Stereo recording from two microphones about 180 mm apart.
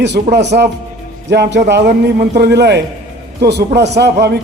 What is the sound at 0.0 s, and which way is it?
A man's voice, 70° right (ahead or behind).